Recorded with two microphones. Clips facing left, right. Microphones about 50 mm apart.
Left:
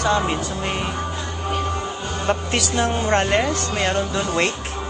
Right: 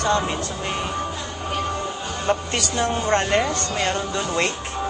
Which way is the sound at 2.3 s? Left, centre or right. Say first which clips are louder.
Left 1 dB; centre.